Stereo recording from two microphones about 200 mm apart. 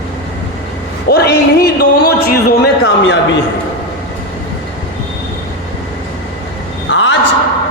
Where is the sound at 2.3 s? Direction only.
50° left (ahead or behind).